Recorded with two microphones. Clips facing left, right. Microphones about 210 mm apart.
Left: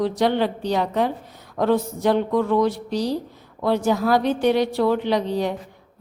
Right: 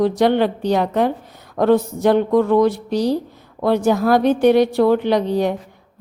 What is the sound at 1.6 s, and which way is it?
A woman's voice, 55° right (ahead or behind).